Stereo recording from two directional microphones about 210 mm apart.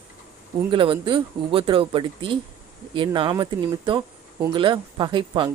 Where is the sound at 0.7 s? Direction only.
25° right (ahead or behind).